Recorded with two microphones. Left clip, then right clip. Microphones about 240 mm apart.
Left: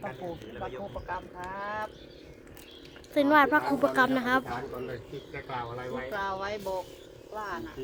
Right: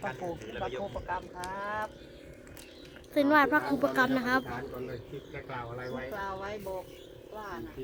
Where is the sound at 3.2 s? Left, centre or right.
Centre.